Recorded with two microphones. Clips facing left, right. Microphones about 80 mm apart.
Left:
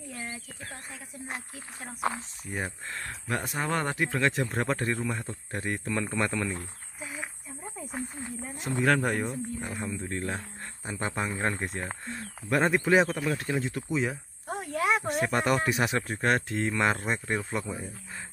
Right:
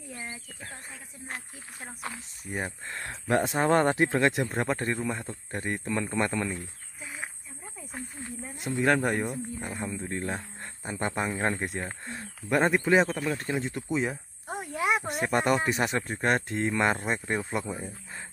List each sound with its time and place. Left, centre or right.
0.1 s insect: centre
2.4 s speech: centre
3.3 s speech: right
4.3 s speech: centre
8.5 s speech: centre
10.9 s speech: centre